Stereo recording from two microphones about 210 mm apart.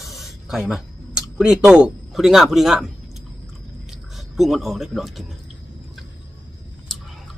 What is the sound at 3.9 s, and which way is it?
Speech, centre (ahead or behind).